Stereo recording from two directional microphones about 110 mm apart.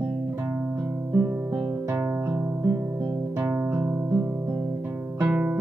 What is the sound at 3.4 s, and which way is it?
Music, 15° right (ahead or behind).